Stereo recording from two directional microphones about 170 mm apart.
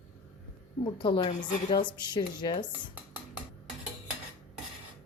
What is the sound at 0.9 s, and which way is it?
A woman's voice, 30° left (ahead or behind).